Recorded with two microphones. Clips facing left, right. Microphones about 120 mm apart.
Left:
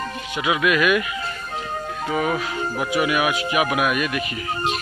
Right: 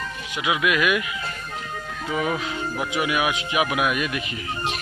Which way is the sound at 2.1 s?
35° left (ahead or behind).